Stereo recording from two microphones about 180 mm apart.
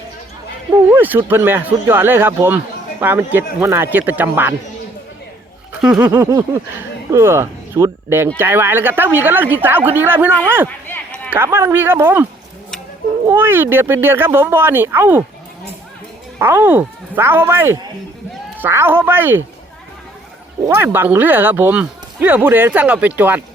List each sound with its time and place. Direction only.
0.9 s speech: 10° right (ahead or behind)
5.8 s a sound: 5° right (ahead or behind)
6.1 s speech: 15° right (ahead or behind)
10.7 s a sound: 10° left (ahead or behind)
11.3 s speech: 15° right (ahead or behind)
13.2 s speech: 10° right (ahead or behind)
16.4 s speech: 15° right (ahead or behind)
20.7 s speech: 15° right (ahead or behind)